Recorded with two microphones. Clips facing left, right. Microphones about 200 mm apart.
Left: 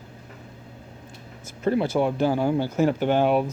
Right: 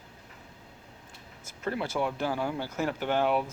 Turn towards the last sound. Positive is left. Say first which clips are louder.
# left 6 dB
turn(degrees=20)  # may be behind; listen again after turning